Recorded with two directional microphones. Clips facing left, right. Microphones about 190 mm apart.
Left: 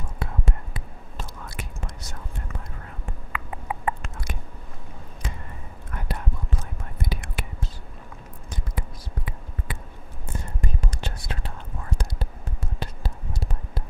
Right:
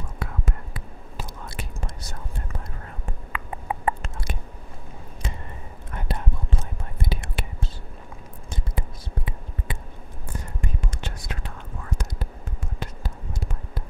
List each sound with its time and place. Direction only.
0.2 s whispering: 25° left (ahead or behind)
1.4 s whispering: 30° right (ahead or behind)
3.3 s a sound: 35° right (ahead or behind)
5.9 s whispering: 25° right (ahead or behind)
10.6 s whispering: 40° left (ahead or behind)
12.7 s a sound: 30° left (ahead or behind)